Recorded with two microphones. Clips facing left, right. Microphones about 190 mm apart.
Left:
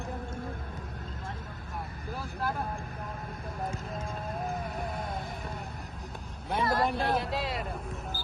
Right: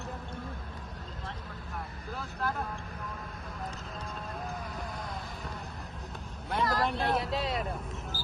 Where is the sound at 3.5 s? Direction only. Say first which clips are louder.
Left 6 dB; 50° left (ahead or behind).